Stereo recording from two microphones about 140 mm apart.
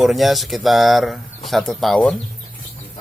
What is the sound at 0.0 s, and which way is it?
Speech, centre (ahead or behind).